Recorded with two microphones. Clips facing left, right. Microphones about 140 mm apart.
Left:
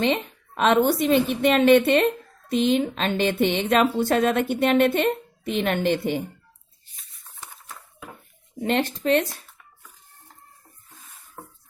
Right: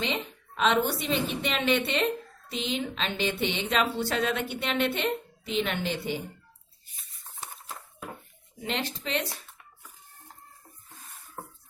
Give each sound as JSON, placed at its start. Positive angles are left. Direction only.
{"t": 0.0, "sound": "speech", "side_deg": 50}
{"t": 8.6, "sound": "speech", "side_deg": 50}